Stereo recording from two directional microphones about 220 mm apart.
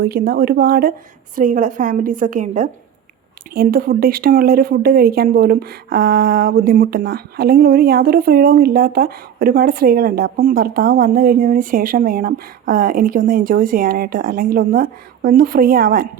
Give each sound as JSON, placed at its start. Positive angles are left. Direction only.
{"t": 0.0, "sound": "speech", "side_deg": -45}